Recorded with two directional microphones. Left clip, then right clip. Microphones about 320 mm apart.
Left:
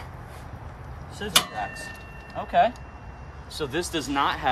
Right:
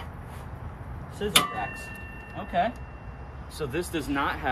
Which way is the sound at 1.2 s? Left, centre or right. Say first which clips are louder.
Even; centre.